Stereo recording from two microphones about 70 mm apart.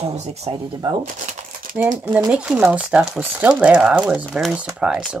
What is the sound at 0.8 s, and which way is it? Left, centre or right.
Speech, right.